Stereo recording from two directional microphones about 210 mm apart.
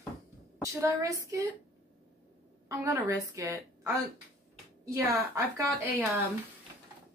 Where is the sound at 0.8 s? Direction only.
15° right (ahead or behind).